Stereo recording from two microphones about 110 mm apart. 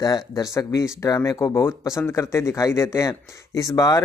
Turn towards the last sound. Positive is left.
turn(degrees=35)  # may be behind; listen again after turning